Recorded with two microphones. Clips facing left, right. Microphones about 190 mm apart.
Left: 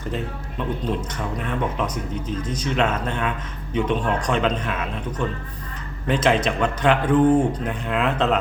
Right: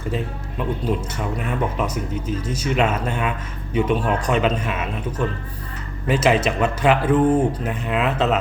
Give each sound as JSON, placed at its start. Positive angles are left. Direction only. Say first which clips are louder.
{"t": 0.9, "sound": "speech", "louder": "right 2 dB", "side_deg": -10}